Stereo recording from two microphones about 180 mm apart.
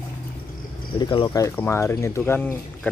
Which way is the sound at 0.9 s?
25° left (ahead or behind).